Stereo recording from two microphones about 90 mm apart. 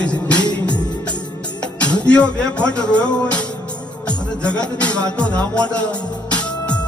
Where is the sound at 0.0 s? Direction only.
15° left (ahead or behind).